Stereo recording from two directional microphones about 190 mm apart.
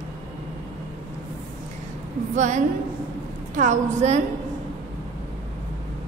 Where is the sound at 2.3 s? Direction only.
40° right (ahead or behind).